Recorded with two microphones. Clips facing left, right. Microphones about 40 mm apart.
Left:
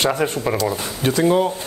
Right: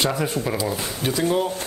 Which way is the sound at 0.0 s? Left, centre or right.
Left.